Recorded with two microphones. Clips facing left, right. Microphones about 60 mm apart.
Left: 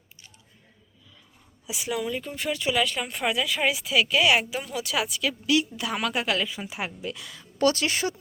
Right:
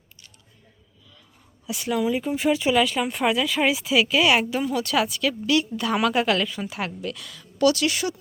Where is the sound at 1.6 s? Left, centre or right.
Centre.